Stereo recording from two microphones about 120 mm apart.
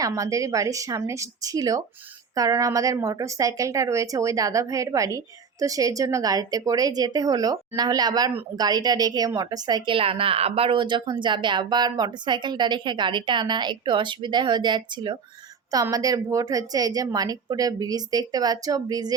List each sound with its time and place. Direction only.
0.0 s a woman's voice: 30° right (ahead or behind)